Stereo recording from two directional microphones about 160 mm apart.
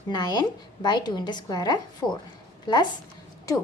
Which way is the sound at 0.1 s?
25° left (ahead or behind).